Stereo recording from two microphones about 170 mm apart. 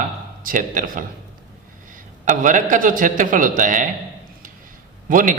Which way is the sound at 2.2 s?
50° right (ahead or behind).